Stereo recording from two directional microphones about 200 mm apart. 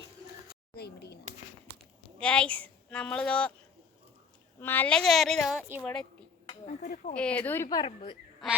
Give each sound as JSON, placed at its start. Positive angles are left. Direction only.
{"t": 0.8, "sound": "a sound", "side_deg": 55}
{"t": 2.0, "sound": "speech", "side_deg": 5}
{"t": 4.6, "sound": "a woman's voice", "side_deg": 10}
{"t": 6.4, "sound": "a sound", "side_deg": 30}
{"t": 6.8, "sound": "speech", "side_deg": 45}
{"t": 7.1, "sound": "a woman's voice", "side_deg": 5}